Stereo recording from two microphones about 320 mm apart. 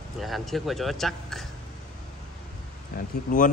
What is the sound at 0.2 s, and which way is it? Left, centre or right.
Speech, centre.